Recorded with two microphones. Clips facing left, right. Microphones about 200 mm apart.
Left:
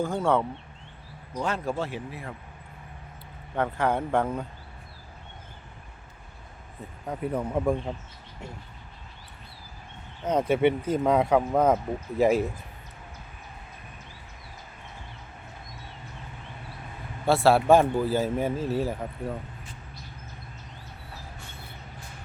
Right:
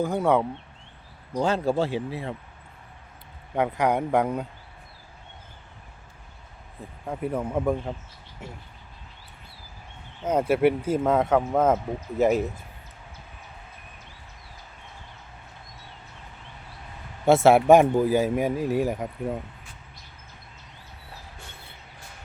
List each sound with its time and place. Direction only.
0.0 s speech: 15° right (ahead or behind)
1.3 s speech: 30° right (ahead or behind)
3.5 s speech: 15° right (ahead or behind)
7.1 s speech: 5° right (ahead or behind)
10.2 s speech: 10° right (ahead or behind)
17.2 s speech: 20° right (ahead or behind)